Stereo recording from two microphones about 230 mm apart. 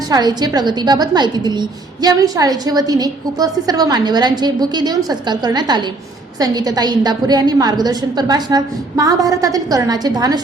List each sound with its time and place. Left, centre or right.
0.1 s a woman's voice: centre